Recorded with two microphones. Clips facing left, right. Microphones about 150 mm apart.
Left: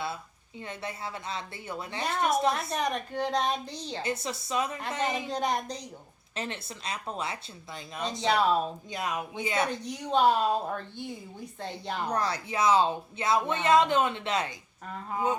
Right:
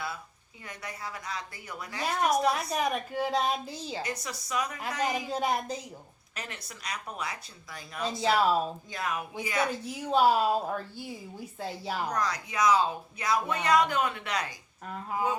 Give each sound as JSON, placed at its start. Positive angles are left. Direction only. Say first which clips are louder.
{"t": 0.6, "sound": "speech", "louder": "left 3 dB", "side_deg": 25}
{"t": 2.0, "sound": "a woman's voice", "louder": "right 1 dB", "side_deg": 0}
{"t": 4.0, "sound": "speech", "louder": "left 4 dB", "side_deg": 25}
{"t": 4.9, "sound": "a woman's voice", "louder": "even", "side_deg": 0}
{"t": 6.3, "sound": "speech", "louder": "left 6 dB", "side_deg": 25}
{"t": 8.0, "sound": "a woman's voice", "louder": "even", "side_deg": -5}
{"t": 8.9, "sound": "speech", "louder": "left 1 dB", "side_deg": 20}
{"t": 9.6, "sound": "a woman's voice", "louder": "even", "side_deg": -5}
{"t": 12.0, "sound": "speech", "louder": "left 3 dB", "side_deg": 30}
{"t": 14.8, "sound": "a woman's voice", "louder": "right 1 dB", "side_deg": 0}